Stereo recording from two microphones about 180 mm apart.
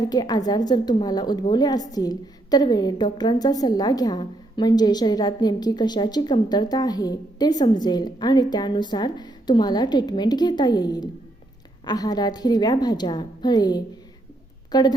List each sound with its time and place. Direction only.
0.0 s a woman's voice: 20° left (ahead or behind)